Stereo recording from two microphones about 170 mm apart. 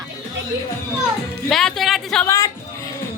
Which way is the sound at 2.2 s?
20° left (ahead or behind).